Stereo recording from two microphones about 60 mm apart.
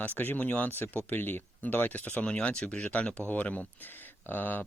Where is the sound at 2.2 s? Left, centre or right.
Centre.